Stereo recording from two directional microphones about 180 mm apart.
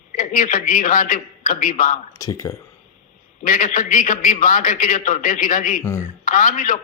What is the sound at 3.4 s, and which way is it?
A man's voice, 50° left (ahead or behind).